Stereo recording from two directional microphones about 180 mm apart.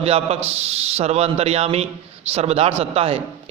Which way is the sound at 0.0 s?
35° right (ahead or behind).